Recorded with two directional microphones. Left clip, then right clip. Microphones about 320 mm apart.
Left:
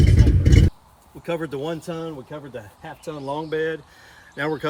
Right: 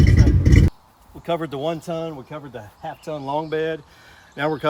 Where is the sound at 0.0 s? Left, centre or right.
Centre.